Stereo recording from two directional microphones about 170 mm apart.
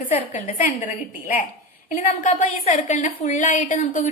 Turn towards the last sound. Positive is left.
turn(degrees=50)  # may be behind; listen again after turning